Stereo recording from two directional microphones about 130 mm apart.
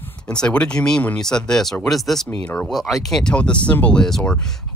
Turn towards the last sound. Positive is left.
turn(degrees=5)  # may be behind; listen again after turning